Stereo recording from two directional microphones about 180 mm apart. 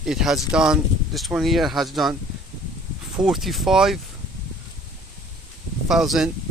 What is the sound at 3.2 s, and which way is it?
Speech, centre (ahead or behind).